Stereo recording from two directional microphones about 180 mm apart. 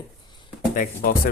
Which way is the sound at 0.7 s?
50° left (ahead or behind).